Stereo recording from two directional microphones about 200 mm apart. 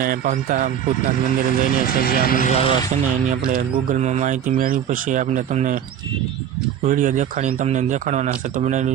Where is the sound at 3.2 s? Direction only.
40° right (ahead or behind).